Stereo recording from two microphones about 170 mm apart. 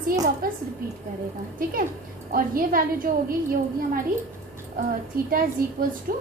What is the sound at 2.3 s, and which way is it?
A woman's voice, 60° right (ahead or behind).